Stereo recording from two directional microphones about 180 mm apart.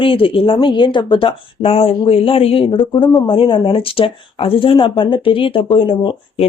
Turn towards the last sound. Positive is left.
turn(degrees=25)  # may be behind; listen again after turning